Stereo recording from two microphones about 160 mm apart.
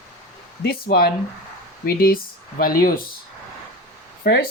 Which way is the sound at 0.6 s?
85° left.